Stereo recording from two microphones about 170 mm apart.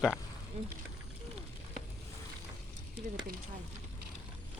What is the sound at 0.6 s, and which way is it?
Speech, 35° right (ahead or behind).